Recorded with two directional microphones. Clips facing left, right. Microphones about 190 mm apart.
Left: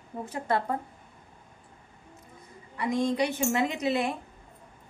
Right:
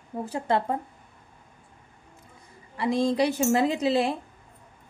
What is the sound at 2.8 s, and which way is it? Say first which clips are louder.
A woman's voice: right 3 dB; 30° right (ahead or behind).